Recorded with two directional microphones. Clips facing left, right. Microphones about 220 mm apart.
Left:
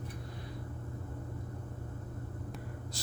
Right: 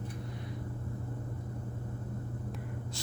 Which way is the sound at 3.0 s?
35° left (ahead or behind).